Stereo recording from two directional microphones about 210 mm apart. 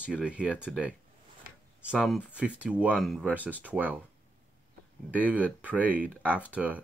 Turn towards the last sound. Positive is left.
turn(degrees=-5)  # may be behind; listen again after turning